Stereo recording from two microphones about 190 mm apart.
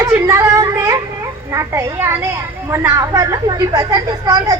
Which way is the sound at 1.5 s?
15° right (ahead or behind).